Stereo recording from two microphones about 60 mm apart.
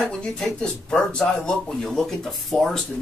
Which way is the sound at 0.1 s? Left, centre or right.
Centre.